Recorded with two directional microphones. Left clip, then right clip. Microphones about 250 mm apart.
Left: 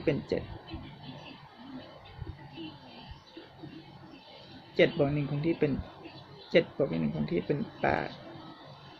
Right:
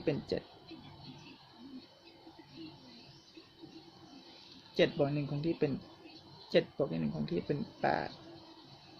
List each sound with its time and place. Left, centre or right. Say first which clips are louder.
0.0 s speech: left 5 dB; centre
4.8 s speech: left 5 dB; centre